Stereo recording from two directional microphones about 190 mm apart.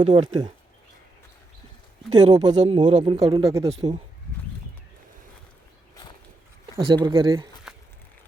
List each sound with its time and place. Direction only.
0.0 s speech: 35° right (ahead or behind)
2.0 s speech: 20° right (ahead or behind)
2.6 s speech: 35° right (ahead or behind); by 3.7 s 20° right (ahead or behind)
3.7 s speech: 30° right (ahead or behind)
6.7 s speech: 25° right (ahead or behind)
7.7 s a sound: centre (ahead or behind)